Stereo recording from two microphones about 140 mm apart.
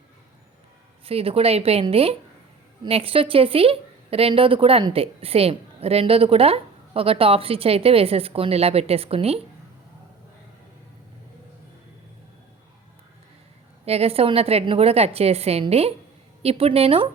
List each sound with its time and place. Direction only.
1.0 s a woman's voice: 45° right (ahead or behind)
13.8 s a woman's voice: 45° right (ahead or behind)